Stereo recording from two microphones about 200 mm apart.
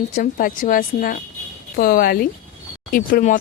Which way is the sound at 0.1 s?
45° left (ahead or behind).